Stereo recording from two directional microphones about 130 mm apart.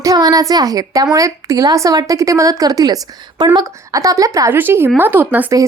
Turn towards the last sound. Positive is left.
turn(degrees=-15)  # may be behind; listen again after turning